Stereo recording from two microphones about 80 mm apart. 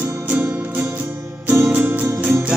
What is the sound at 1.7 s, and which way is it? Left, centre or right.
Music, centre.